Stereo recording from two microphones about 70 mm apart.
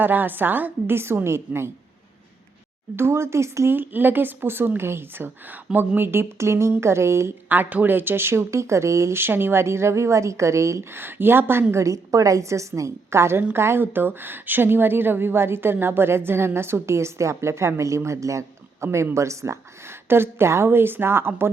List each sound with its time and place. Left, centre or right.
0.0 s speech: right
2.9 s speech: right
7.4 s speech: right
11.0 s speech: right
11.7 s a woman's voice: right